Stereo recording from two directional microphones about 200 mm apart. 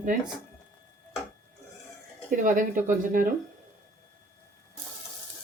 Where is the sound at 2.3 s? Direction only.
40° right (ahead or behind).